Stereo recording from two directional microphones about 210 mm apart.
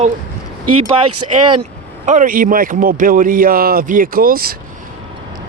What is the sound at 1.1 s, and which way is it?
Speech, 90° right.